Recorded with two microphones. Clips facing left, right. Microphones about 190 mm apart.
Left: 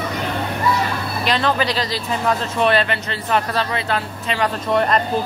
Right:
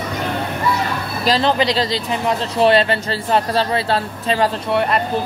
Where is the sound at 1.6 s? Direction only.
25° right (ahead or behind).